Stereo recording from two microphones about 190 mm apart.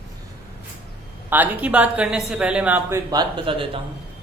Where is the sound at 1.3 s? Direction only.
10° right (ahead or behind).